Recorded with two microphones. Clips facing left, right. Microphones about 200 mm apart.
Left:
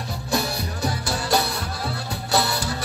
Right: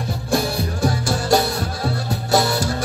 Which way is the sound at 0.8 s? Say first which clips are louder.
Right 6 dB; 50° right (ahead or behind).